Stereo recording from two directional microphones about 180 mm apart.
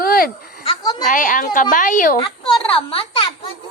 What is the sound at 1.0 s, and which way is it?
Speech, 45° left (ahead or behind).